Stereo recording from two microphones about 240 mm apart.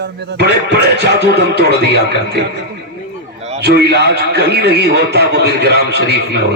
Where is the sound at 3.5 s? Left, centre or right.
Right.